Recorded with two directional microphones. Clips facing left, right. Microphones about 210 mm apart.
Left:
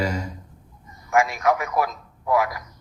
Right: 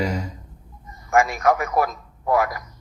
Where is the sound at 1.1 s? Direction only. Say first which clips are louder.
Right 2 dB; 45° right (ahead or behind).